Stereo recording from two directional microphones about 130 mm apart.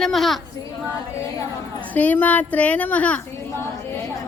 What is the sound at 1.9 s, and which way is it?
A woman's voice, 15° left (ahead or behind).